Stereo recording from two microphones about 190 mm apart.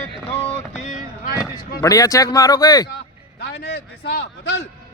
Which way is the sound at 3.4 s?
55° left (ahead or behind).